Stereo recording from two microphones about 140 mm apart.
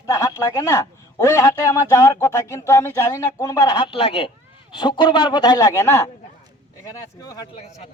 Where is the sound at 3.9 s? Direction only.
40° left (ahead or behind); by 6.1 s 15° left (ahead or behind).